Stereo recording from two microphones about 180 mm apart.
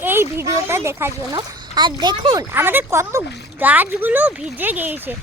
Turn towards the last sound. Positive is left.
turn(degrees=-10)  # may be behind; listen again after turning